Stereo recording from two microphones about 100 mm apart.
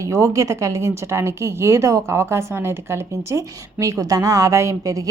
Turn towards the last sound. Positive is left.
turn(degrees=-30)  # may be behind; listen again after turning